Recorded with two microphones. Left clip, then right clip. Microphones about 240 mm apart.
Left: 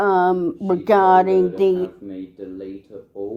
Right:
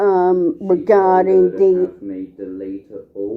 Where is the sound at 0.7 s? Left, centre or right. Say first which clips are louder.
Right 1 dB; left.